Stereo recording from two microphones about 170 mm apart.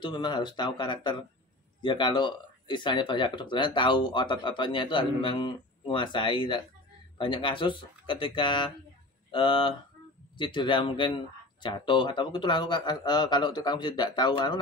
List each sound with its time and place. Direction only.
0.0 s speech: 25° left (ahead or behind)